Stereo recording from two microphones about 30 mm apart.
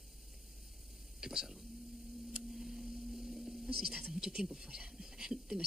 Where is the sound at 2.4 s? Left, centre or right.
Centre.